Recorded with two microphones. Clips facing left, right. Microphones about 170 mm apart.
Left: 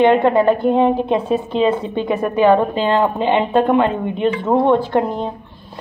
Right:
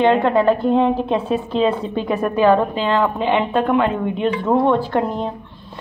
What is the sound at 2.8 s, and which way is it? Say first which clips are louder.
Speech: left 2 dB; 30° left (ahead or behind).